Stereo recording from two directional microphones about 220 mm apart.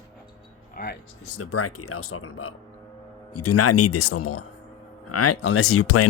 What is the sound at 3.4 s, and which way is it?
Speech, 90° left.